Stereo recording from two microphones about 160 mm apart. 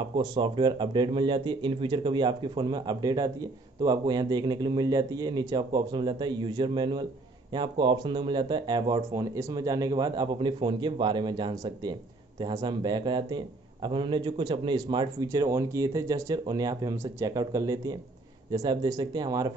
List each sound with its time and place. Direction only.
0.0 s speech: 30° right (ahead or behind)